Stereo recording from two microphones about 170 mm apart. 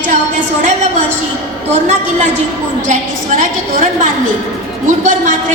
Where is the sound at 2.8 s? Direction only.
50° right (ahead or behind).